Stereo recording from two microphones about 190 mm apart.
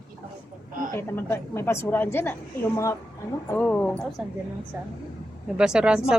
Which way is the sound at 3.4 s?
10° left (ahead or behind).